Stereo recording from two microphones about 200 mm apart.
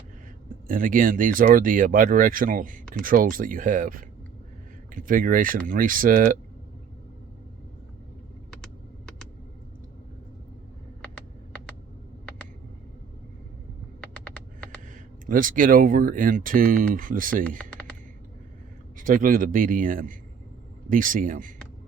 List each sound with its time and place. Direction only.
0.7 s speech: 45° right (ahead or behind)
14.9 s speech: 40° right (ahead or behind)
18.9 s speech: 45° right (ahead or behind)